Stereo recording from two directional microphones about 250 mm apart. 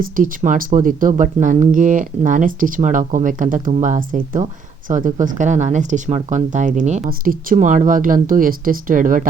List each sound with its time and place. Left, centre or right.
0.0 s speech: right